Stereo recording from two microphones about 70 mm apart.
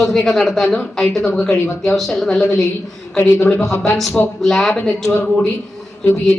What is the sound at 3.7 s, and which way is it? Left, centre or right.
Speech, left.